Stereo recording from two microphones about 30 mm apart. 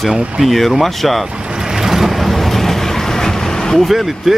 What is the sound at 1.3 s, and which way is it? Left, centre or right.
Vehicle, right.